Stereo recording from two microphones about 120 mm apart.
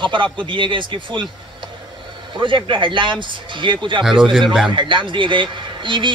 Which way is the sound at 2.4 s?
45° right (ahead or behind).